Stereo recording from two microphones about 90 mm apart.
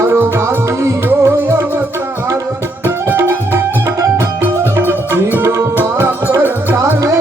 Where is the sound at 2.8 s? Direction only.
25° right (ahead or behind).